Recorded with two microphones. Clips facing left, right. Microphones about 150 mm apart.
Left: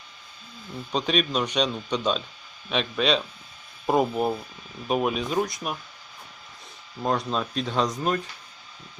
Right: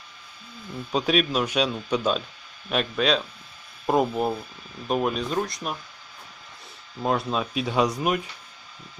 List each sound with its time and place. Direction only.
0.9 s speech: 5° right (ahead or behind)
7.0 s speech: 5° right (ahead or behind)